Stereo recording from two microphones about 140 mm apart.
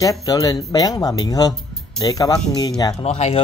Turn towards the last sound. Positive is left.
turn(degrees=50)  # may be behind; listen again after turning